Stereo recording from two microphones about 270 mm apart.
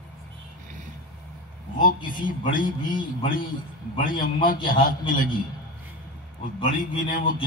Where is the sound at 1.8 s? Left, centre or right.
Left.